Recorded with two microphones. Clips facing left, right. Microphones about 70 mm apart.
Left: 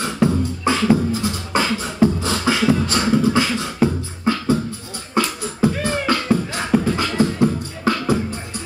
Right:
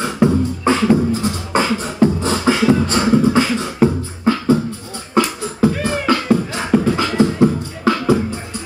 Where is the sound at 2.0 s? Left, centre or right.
Centre.